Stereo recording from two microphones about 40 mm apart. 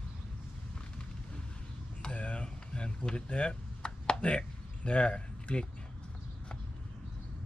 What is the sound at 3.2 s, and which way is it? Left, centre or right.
Chop, left.